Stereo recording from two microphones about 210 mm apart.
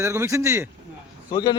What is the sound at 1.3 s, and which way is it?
Speech, 20° left (ahead or behind).